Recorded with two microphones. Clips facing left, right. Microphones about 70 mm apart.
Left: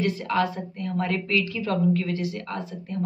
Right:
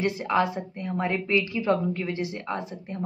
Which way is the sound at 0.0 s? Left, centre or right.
Centre.